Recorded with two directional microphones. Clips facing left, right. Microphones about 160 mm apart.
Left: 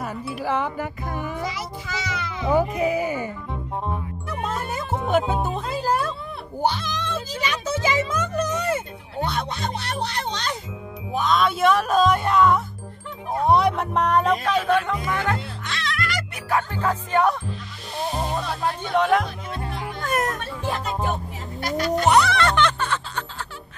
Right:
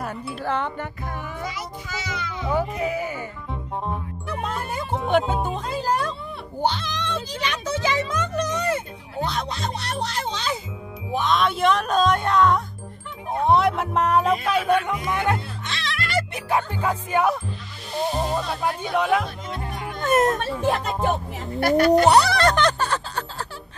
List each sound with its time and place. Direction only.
0.0 s speech: centre (ahead or behind)
2.5 s speech: 15° left (ahead or behind)
3.8 s music: centre (ahead or behind)
6.6 s speech: 10° left (ahead or behind); by 19.2 s 5° right (ahead or behind)
20.0 s speech: 25° right (ahead or behind)
21.5 s speech: 60° right (ahead or behind)
22.0 s speech: 35° right (ahead or behind)